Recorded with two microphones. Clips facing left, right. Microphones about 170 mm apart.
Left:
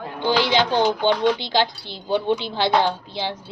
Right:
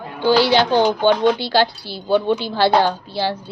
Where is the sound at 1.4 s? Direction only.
20° left (ahead or behind).